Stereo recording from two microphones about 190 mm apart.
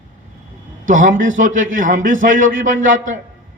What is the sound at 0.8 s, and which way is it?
A man's voice, 45° right (ahead or behind).